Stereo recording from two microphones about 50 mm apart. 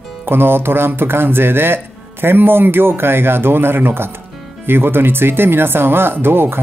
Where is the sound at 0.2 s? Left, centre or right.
Right.